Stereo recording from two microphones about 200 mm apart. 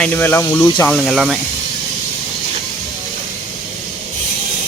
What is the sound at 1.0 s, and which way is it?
Speech, centre (ahead or behind).